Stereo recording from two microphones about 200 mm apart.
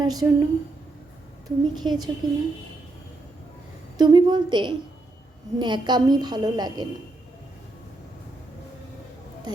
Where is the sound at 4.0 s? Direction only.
20° right (ahead or behind).